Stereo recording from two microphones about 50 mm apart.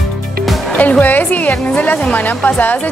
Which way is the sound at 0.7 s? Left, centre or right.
Left.